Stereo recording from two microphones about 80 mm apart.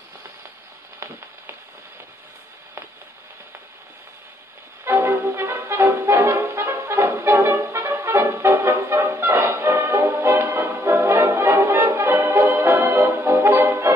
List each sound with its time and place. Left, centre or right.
4.8 s music: right
5.2 s brass instrument: right
5.5 s brass instrument: right
9.8 s music: right